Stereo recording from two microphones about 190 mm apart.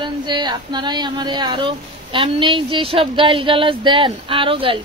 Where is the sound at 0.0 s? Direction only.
25° right (ahead or behind).